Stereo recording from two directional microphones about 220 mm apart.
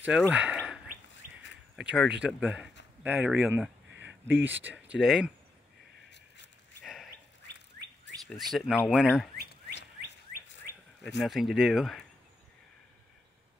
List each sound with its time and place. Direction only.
0.0 s speech: 5° right (ahead or behind)
1.8 s speech: 5° right (ahead or behind)
3.9 s a sound: 55° right (ahead or behind)
4.6 s speech: 5° right (ahead or behind)
6.0 s a sound: 55° left (ahead or behind)
6.8 s dog: centre (ahead or behind)
7.4 s bird: 55° left (ahead or behind)
8.3 s speech: centre (ahead or behind)
9.4 s a sound: 50° left (ahead or behind)
11.2 s speech: centre (ahead or behind)